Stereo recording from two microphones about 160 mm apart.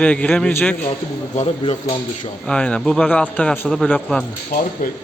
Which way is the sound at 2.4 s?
5° left (ahead or behind).